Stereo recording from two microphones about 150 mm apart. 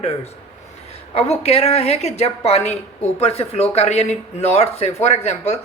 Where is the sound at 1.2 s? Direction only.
45° left (ahead or behind).